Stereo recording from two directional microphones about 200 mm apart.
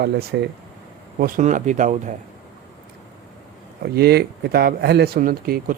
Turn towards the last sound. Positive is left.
turn(degrees=-45)  # may be behind; listen again after turning